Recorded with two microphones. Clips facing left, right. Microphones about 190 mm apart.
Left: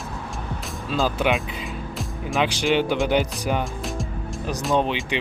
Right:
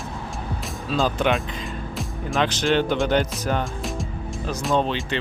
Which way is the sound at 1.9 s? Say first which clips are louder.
Even; centre (ahead or behind).